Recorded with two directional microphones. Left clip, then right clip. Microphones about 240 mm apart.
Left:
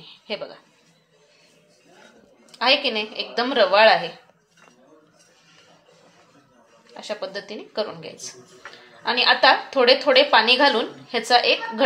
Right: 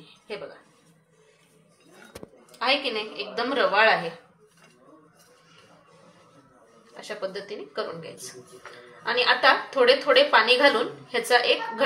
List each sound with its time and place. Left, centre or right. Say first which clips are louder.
0.3 s a woman's voice: left 6 dB; left
2.6 s a woman's voice: left 5 dB; left
7.0 s a woman's voice: left 3 dB; left